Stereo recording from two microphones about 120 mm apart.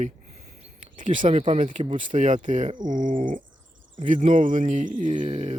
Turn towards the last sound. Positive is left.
turn(degrees=-80)